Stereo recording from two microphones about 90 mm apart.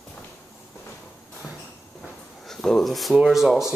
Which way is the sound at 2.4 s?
5° left (ahead or behind).